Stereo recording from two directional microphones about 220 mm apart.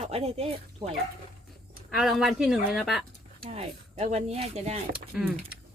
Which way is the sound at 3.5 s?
30° right (ahead or behind).